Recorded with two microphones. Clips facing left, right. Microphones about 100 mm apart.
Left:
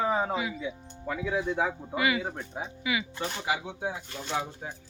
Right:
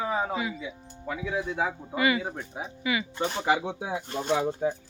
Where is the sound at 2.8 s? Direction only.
10° left (ahead or behind).